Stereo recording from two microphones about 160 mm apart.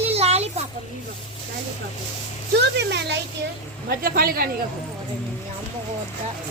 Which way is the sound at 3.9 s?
70° right (ahead or behind).